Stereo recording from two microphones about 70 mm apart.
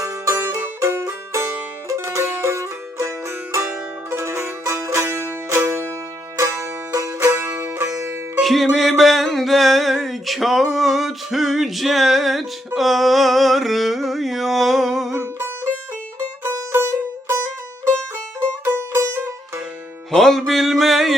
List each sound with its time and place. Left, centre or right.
0.3 s music: right
7.2 s music: right
8.4 s music: centre
15.1 s music: right
20.1 s music: centre